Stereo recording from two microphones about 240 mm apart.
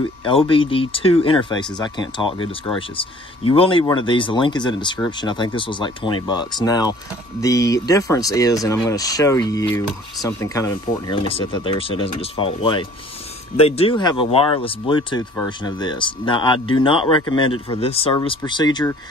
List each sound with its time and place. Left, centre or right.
0.3 s speech: left